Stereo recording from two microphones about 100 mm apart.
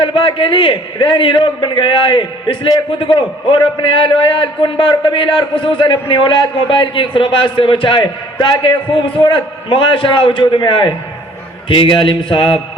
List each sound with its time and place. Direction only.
0.0 s a man's voice: 55° left (ahead or behind)